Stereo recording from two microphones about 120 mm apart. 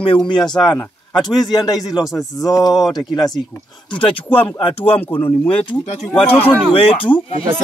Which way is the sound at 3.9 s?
50° left (ahead or behind).